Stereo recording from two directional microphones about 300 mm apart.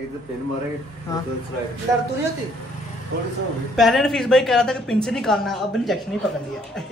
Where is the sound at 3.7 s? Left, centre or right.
Centre.